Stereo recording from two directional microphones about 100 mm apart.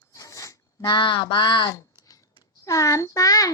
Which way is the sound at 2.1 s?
35° left (ahead or behind).